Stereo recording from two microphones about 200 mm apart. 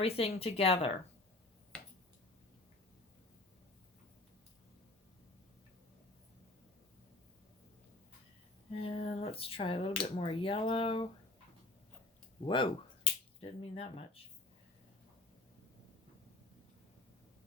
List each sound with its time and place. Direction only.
0.0 s speech: 30° left (ahead or behind)
1.7 s finger snapping: 5° left (ahead or behind)
9.0 s speech: 30° left (ahead or behind)
12.5 s speech: 25° left (ahead or behind)